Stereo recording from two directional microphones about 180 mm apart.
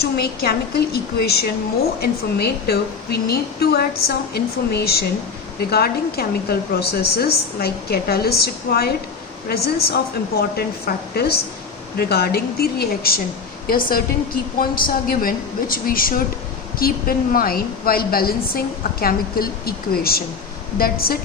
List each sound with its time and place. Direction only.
0.0 s a woman's voice: 60° left (ahead or behind)